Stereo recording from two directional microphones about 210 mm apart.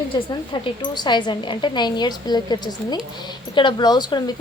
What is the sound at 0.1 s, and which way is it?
Speech, 25° left (ahead or behind).